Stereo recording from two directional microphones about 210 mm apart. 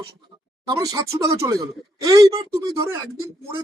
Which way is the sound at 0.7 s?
15° right (ahead or behind).